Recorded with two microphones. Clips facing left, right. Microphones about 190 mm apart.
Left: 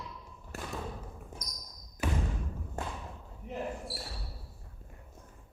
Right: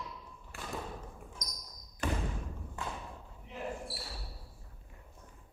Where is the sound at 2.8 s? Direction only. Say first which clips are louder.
Left 2 dB; 40° left (ahead or behind).